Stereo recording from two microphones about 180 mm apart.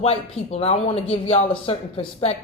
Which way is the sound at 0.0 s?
35° left (ahead or behind).